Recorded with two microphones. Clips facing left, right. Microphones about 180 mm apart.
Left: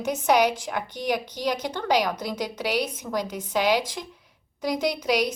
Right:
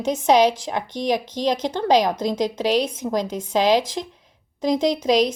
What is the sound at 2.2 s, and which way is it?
Speech, 90° right.